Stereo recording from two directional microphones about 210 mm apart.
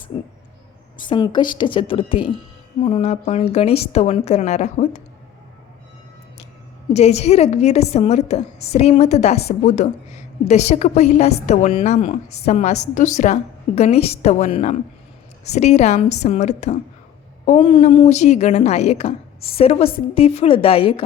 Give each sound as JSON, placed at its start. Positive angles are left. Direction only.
{"t": 0.1, "sound": "a woman's voice", "side_deg": 25}
{"t": 6.9, "sound": "a woman's voice", "side_deg": 30}